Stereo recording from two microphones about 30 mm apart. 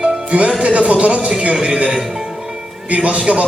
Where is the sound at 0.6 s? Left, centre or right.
Right.